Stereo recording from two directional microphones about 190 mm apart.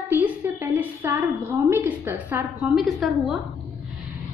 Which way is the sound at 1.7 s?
10° right (ahead or behind).